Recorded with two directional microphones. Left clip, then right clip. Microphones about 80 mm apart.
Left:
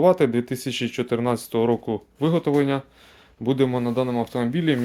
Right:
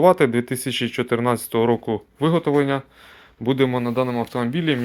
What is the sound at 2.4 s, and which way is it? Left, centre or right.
Speech, centre.